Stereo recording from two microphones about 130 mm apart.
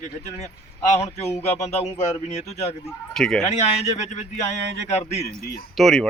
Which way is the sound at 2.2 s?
55° left (ahead or behind).